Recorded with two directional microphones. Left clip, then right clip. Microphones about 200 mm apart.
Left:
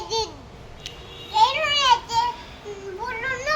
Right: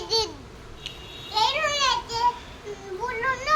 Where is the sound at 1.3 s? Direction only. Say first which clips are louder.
Left 5 dB; 35° right (ahead or behind).